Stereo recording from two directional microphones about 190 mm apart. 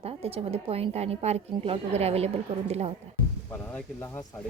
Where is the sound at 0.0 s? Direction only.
30° right (ahead or behind).